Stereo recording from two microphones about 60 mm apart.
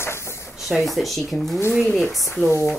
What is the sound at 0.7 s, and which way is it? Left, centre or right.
Speech, centre.